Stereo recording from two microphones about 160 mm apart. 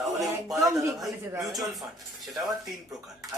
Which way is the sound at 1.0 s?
Centre (ahead or behind).